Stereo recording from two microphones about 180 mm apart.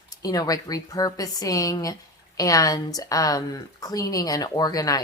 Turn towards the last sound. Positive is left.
turn(degrees=20)  # may be behind; listen again after turning